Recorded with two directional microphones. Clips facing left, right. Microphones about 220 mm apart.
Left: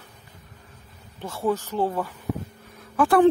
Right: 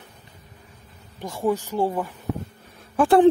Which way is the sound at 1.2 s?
15° right (ahead or behind).